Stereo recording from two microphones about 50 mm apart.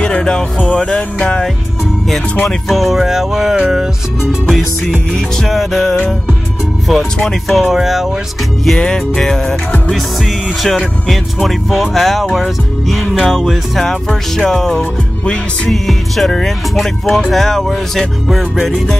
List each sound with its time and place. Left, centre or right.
0.0 s speech: centre
0.7 s music: centre
2.4 s speech: centre
4.5 s music: centre
5.1 s speech: centre
6.9 s music: centre
7.4 s speech: centre
8.7 s music: centre
11.1 s speech: centre
14.0 s music: centre
15.7 s speech: centre